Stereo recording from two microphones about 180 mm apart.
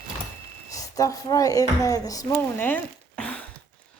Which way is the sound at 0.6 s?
20° left (ahead or behind).